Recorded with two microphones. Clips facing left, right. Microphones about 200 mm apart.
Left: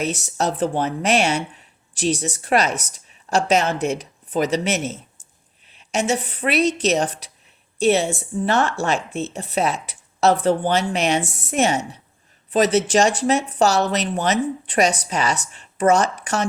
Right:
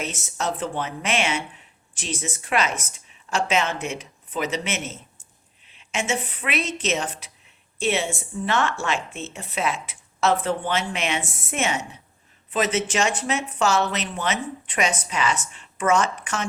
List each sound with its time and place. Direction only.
0.0 s speech: 35° left (ahead or behind)